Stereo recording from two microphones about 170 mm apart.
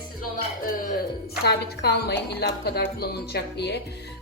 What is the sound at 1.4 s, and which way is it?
A woman's voice, 75° left (ahead or behind).